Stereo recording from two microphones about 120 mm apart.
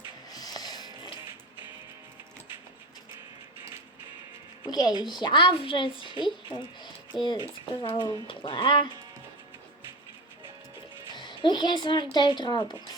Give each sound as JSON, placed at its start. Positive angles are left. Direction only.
{"t": 0.3, "sound": "music", "side_deg": 30}
{"t": 4.6, "sound": "speech", "side_deg": 35}
{"t": 5.2, "sound": "a woman's voice", "side_deg": 45}
{"t": 11.1, "sound": "speech", "side_deg": 40}